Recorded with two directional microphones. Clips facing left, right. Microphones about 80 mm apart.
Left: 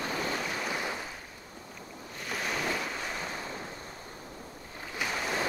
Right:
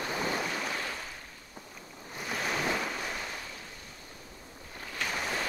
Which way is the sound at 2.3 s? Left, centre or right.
Centre.